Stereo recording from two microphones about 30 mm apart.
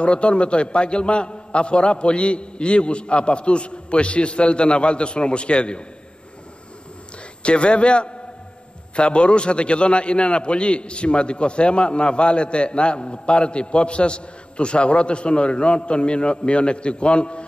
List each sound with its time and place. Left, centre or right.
0.0 s a man's voice: left
7.4 s a man's voice: left